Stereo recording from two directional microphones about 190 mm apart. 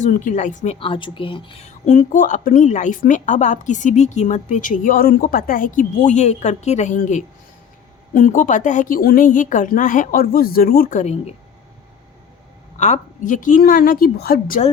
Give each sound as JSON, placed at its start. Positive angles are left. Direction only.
{"t": 0.0, "sound": "a woman's voice", "side_deg": 40}
{"t": 12.7, "sound": "a woman's voice", "side_deg": 40}